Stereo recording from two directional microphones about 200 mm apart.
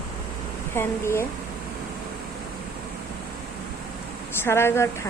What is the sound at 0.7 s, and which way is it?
Speech, 10° left (ahead or behind).